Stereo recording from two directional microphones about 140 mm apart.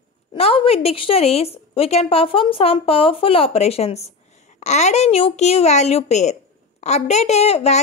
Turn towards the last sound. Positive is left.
turn(degrees=50)  # may be behind; listen again after turning